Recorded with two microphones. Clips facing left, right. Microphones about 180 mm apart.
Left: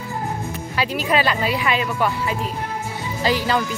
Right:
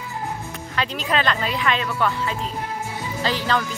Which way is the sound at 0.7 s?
10° left (ahead or behind).